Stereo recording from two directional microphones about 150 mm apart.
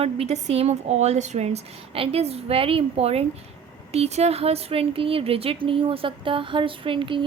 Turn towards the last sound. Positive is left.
turn(degrees=-35)  # may be behind; listen again after turning